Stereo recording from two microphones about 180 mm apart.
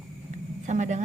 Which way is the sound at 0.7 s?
40° right (ahead or behind).